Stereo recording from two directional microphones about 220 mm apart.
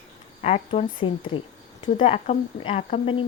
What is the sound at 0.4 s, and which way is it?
Speech, 30° left (ahead or behind).